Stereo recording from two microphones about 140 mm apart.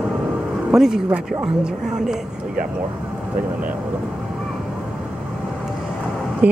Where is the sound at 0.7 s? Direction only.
5° right (ahead or behind).